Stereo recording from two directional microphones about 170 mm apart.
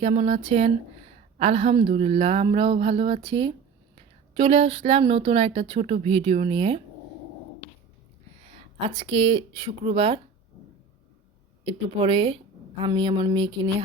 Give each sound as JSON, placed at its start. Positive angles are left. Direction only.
{"t": 0.0, "sound": "speech", "side_deg": -35}
{"t": 9.0, "sound": "speech", "side_deg": -30}
{"t": 11.6, "sound": "speech", "side_deg": -35}
{"t": 12.8, "sound": "a sound", "side_deg": -30}